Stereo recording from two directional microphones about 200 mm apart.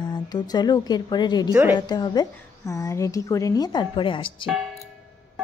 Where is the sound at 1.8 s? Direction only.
20° left (ahead or behind).